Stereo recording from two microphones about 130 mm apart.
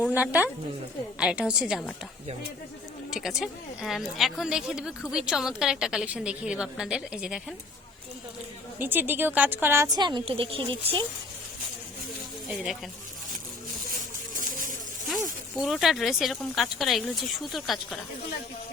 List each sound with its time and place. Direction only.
0.0 s a woman's voice: 10° right (ahead or behind)
3.1 s speech: centre (ahead or behind)
8.8 s a woman's voice: 15° right (ahead or behind)
10.0 s speech: 35° right (ahead or behind)
15.5 s speech: centre (ahead or behind)